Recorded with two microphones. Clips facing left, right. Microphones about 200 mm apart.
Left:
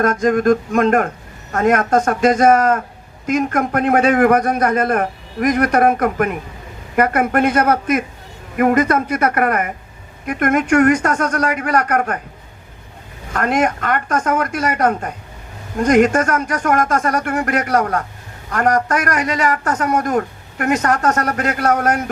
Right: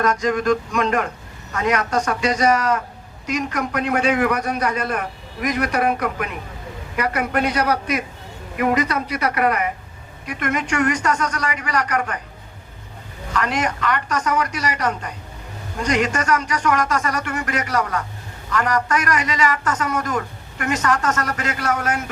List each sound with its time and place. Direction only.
0.0 s a man's voice: 50° left (ahead or behind)
13.3 s a man's voice: 50° left (ahead or behind)